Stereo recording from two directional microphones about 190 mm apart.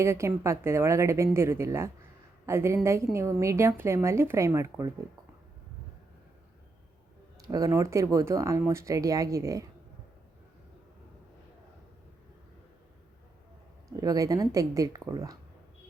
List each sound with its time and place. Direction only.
0.0 s a woman's voice: 15° right (ahead or behind)
7.3 s a woman's voice: 20° right (ahead or behind)
13.9 s a woman's voice: 20° right (ahead or behind)